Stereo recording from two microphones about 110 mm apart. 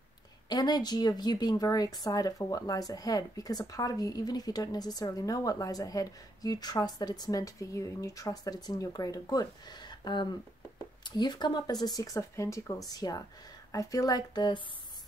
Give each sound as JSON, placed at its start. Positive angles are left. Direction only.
{"t": 0.5, "sound": "speech", "side_deg": 40}